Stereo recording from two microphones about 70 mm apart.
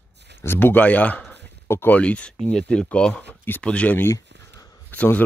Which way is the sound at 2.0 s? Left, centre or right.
Centre.